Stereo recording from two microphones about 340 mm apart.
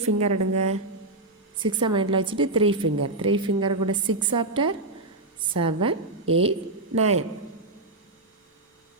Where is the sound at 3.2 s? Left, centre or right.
Centre.